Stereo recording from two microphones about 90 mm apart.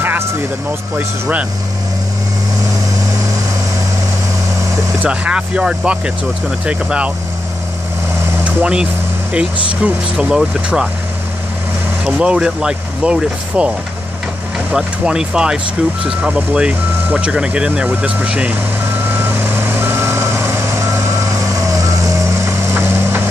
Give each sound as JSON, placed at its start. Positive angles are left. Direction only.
{"t": 0.0, "sound": "speech", "side_deg": -20}
{"t": 5.0, "sound": "speech", "side_deg": -15}
{"t": 8.5, "sound": "speech", "side_deg": -15}
{"t": 12.1, "sound": "speech", "side_deg": -10}
{"t": 19.0, "sound": "reversing beeps", "side_deg": -20}
{"t": 21.6, "sound": "vehicle", "side_deg": -35}